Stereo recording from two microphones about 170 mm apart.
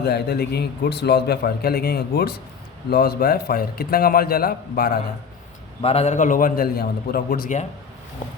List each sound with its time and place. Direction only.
0.0 s a man's voice: 70° left (ahead or behind)
5.8 s a man's voice: 35° left (ahead or behind)